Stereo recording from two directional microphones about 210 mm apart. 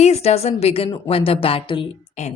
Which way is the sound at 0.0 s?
30° left (ahead or behind).